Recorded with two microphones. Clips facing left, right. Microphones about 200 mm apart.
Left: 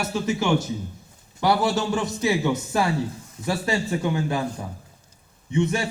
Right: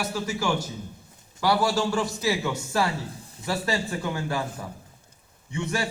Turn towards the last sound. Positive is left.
turn(degrees=20)  # may be behind; listen again after turning